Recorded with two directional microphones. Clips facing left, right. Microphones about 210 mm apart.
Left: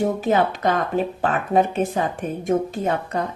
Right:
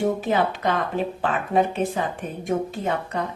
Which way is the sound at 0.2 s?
45° left (ahead or behind).